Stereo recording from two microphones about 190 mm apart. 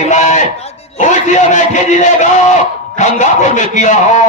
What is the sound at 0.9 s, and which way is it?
A man's voice, 40° left (ahead or behind).